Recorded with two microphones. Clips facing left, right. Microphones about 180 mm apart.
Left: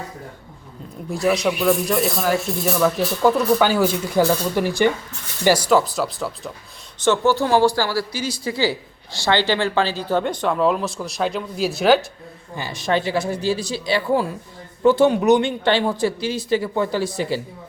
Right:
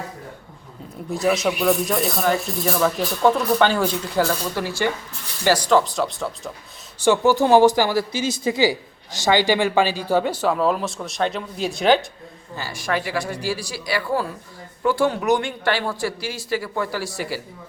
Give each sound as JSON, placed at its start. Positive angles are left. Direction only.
{"t": 1.1, "sound": "speech", "side_deg": 0}
{"t": 7.0, "sound": "speech", "side_deg": -15}
{"t": 12.5, "sound": "speech", "side_deg": 20}